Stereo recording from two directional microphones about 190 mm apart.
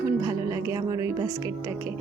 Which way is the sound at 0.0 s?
15° right (ahead or behind).